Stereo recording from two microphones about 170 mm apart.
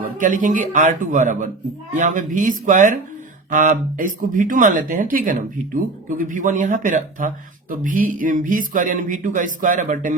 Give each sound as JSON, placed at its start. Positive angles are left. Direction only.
{"t": 0.0, "sound": "speech", "side_deg": -50}